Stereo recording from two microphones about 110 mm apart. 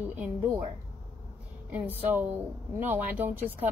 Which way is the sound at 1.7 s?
15° right (ahead or behind).